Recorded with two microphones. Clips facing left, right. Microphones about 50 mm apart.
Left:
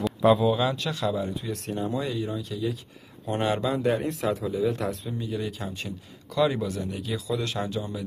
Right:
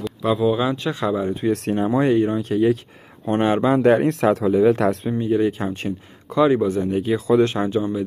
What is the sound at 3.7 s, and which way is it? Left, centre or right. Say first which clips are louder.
A man's voice: right 10 dB; right.